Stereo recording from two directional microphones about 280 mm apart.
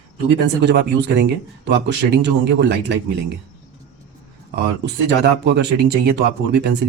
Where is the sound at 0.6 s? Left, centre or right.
Right.